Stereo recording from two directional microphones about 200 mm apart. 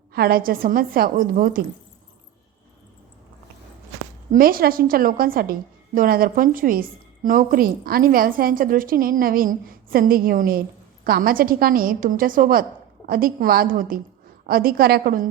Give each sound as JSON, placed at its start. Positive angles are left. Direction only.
{"t": 0.1, "sound": "a woman's voice", "side_deg": -50}
{"t": 4.3, "sound": "a woman's voice", "side_deg": -45}